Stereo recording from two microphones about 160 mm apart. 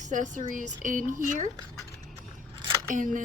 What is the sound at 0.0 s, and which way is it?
Speech, 50° right (ahead or behind).